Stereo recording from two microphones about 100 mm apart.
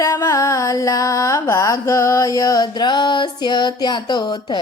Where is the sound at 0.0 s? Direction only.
30° left (ahead or behind).